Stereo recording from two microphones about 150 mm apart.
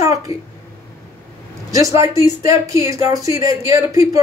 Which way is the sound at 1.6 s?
20° right (ahead or behind).